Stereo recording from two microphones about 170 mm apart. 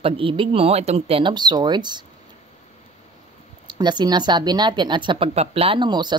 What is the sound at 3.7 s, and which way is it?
A woman's voice, 25° right (ahead or behind).